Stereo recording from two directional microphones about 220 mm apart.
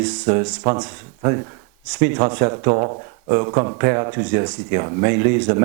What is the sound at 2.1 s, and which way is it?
Speech, 20° right (ahead or behind).